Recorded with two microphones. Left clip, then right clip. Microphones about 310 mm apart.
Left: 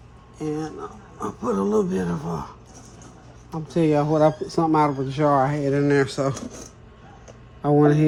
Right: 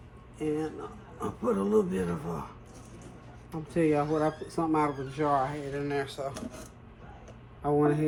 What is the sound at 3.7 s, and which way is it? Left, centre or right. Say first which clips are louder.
Speech: left 6 dB; left.